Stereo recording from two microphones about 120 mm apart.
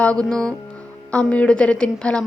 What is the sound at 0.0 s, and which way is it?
A woman's voice, 10° left (ahead or behind).